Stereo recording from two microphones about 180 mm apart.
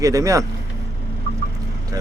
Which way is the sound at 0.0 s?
20° right (ahead or behind).